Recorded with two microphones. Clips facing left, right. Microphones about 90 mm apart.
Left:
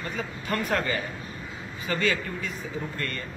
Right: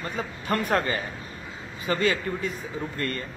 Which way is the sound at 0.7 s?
35° right (ahead or behind).